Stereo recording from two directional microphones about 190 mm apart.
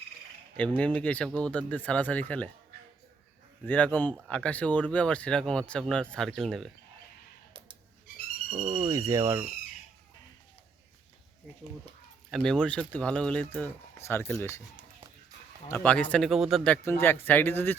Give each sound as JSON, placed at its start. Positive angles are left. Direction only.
{"t": 0.8, "sound": "speech", "side_deg": 5}
{"t": 3.7, "sound": "speech", "side_deg": 10}
{"t": 8.5, "sound": "speech", "side_deg": -25}
{"t": 12.3, "sound": "speech", "side_deg": 5}
{"t": 15.7, "sound": "speech", "side_deg": 5}